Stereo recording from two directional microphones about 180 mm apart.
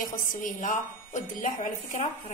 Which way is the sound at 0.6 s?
45° left (ahead or behind).